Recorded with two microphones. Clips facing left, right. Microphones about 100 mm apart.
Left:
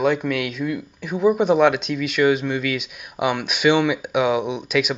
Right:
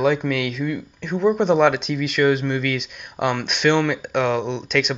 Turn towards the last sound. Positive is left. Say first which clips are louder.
# even
turn(degrees=5)  # may be behind; listen again after turning